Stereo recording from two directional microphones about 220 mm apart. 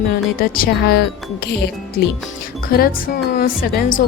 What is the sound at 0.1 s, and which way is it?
Speech, 40° left (ahead or behind).